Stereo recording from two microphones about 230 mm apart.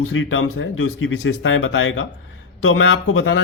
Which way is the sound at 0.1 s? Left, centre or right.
Left.